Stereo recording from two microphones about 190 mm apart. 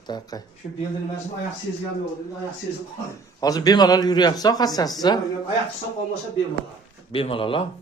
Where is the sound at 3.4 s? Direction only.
20° left (ahead or behind).